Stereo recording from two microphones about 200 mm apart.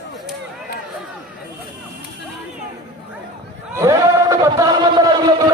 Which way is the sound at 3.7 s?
15° right (ahead or behind).